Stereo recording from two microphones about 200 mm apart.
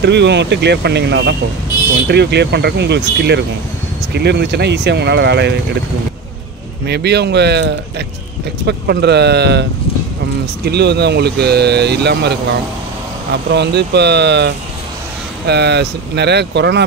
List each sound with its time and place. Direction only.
0.0 s speech: 60° right (ahead or behind)
6.9 s speech: 55° right (ahead or behind)
8.6 s speech: 55° right (ahead or behind)
13.5 s speech: 55° right (ahead or behind)